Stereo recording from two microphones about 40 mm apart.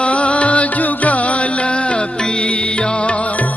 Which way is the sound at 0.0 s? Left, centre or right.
Left.